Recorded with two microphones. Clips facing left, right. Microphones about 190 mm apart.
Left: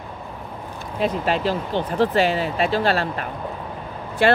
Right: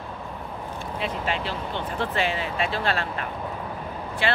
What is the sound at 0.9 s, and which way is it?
Speech, 40° left (ahead or behind).